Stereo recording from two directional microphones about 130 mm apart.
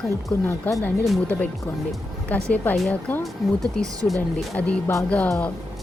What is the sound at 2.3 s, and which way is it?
Speech, 10° left (ahead or behind).